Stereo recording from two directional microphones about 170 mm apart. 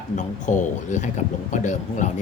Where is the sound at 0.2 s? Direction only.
45° left (ahead or behind).